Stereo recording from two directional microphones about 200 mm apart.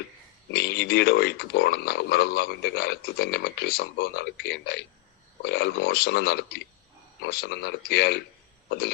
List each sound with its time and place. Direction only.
0.5 s speech: 55° left (ahead or behind)